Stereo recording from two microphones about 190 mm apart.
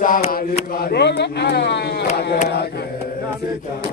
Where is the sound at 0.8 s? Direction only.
60° left (ahead or behind).